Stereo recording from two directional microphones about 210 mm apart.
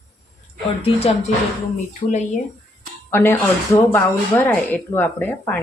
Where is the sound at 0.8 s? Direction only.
30° left (ahead or behind).